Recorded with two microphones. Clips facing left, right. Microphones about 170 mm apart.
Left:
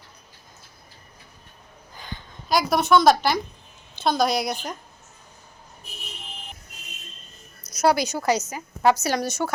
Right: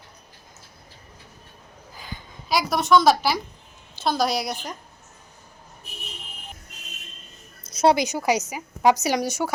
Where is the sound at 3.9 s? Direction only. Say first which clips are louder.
Left 1 dB; 5° right (ahead or behind).